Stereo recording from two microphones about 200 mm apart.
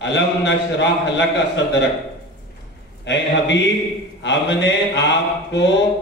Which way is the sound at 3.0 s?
60° left (ahead or behind).